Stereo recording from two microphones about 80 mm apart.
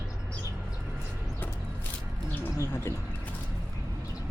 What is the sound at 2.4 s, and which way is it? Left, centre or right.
Speech, left.